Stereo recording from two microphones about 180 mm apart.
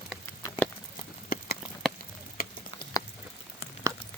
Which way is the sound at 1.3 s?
55° left (ahead or behind).